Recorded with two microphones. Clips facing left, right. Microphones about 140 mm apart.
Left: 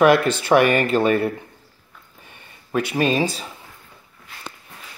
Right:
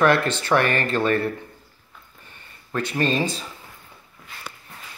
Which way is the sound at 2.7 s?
10° left (ahead or behind).